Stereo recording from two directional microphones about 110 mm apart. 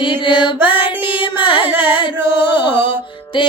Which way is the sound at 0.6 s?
15° right (ahead or behind).